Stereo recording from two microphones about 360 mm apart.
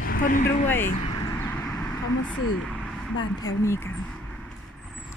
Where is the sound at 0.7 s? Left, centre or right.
Centre.